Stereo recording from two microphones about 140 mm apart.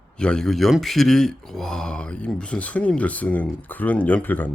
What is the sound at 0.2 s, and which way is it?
Speech, 5° left (ahead or behind).